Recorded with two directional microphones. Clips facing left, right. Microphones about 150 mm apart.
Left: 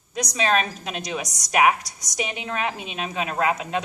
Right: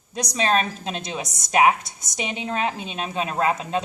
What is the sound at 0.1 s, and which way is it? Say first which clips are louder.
A woman's voice: right 1 dB; 35° right (ahead or behind).